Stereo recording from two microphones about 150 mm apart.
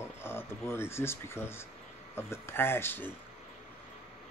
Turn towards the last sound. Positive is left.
turn(degrees=15)  # may be behind; listen again after turning